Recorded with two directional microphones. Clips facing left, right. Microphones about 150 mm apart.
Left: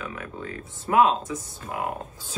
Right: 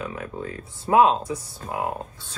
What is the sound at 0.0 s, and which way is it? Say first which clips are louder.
Speech: right 3 dB; 30° right (ahead or behind).